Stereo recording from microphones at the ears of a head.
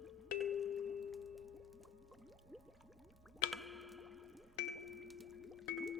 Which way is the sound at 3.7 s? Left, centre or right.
Left.